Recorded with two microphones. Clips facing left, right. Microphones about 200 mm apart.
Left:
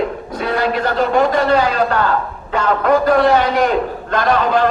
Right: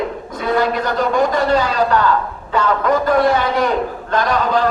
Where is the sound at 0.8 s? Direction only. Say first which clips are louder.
Left 2 dB; 50° left (ahead or behind).